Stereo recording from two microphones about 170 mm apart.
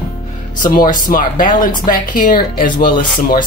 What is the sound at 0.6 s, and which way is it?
A woman's voice, 50° left (ahead or behind).